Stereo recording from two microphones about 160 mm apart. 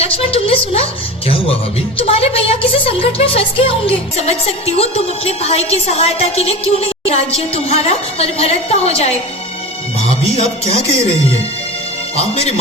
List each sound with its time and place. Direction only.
0.0 s a sound: 35° left (ahead or behind)
2.0 s a woman's voice: 35° left (ahead or behind)
12.1 s a woman's voice: 40° left (ahead or behind)